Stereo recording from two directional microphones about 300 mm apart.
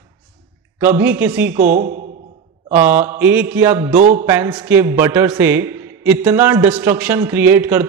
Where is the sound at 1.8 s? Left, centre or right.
Right.